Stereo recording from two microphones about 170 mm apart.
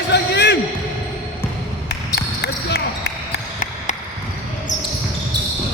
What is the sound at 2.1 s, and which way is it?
Basketball bounce, 70° left (ahead or behind).